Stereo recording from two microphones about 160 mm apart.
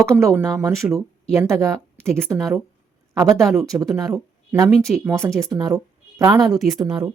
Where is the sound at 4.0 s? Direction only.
20° right (ahead or behind).